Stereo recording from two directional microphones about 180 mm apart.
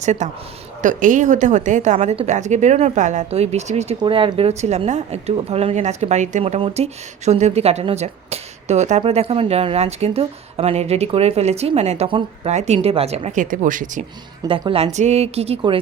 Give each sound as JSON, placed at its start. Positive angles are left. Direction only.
{"t": 0.0, "sound": "speech", "side_deg": -40}
{"t": 4.0, "sound": "speech", "side_deg": -30}
{"t": 14.4, "sound": "speech", "side_deg": -30}